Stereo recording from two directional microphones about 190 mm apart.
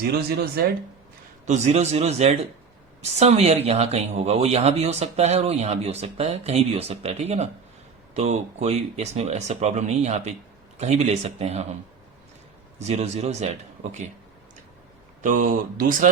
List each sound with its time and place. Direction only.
0.1 s speech: 55° right (ahead or behind)
1.5 s speech: 35° right (ahead or behind)
12.9 s speech: 35° right (ahead or behind)
15.2 s speech: 45° right (ahead or behind)